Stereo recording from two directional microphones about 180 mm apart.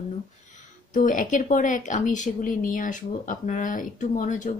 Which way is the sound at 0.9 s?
45° left (ahead or behind).